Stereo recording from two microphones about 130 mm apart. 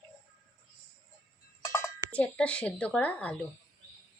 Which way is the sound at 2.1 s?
10° left (ahead or behind).